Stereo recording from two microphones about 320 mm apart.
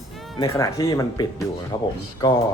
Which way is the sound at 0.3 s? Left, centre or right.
Centre.